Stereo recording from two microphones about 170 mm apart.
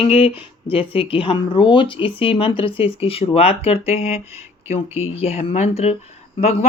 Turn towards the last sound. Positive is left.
turn(degrees=40)  # may be behind; listen again after turning